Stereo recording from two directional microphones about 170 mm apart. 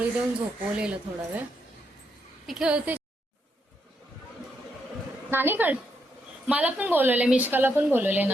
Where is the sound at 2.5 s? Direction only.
5° right (ahead or behind).